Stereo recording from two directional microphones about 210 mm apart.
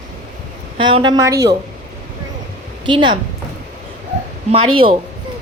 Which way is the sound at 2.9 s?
25° right (ahead or behind).